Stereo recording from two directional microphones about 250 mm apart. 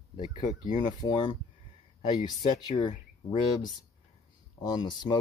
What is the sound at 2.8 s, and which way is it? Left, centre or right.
Speech, centre.